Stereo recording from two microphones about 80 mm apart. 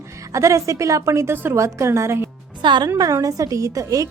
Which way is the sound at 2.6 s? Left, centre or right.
Right.